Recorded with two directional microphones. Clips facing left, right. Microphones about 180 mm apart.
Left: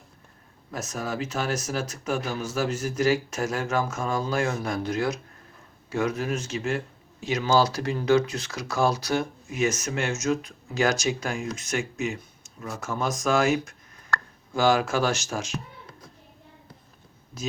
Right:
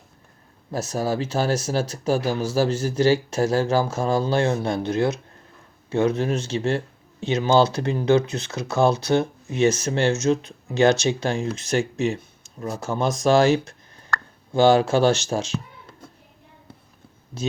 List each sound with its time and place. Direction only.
0.7 s speech: 30° right (ahead or behind)